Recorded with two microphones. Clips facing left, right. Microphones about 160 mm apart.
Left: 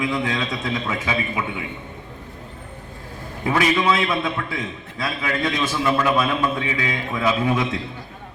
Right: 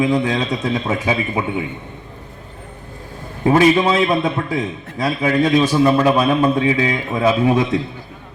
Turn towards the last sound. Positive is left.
turn(degrees=-35)  # may be behind; listen again after turning